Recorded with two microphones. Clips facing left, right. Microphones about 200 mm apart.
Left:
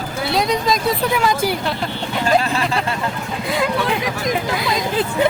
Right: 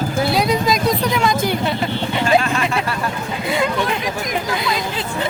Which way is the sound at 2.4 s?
35° left (ahead or behind).